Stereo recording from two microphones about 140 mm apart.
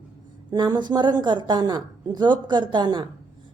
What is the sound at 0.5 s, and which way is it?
A woman's voice, 30° right (ahead or behind).